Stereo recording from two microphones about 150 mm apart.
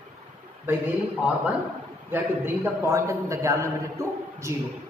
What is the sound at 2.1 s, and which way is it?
A man's voice, 15° right (ahead or behind).